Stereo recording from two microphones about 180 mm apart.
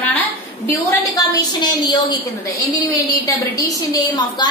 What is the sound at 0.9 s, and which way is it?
A woman's voice, 20° left (ahead or behind).